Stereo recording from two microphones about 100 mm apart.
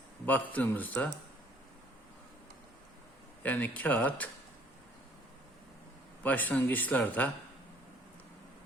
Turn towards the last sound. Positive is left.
turn(degrees=15)  # may be behind; listen again after turning